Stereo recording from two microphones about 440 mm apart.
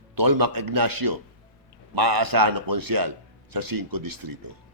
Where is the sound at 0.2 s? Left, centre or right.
Right.